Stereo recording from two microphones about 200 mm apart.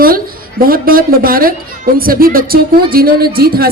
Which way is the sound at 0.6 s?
45° right (ahead or behind).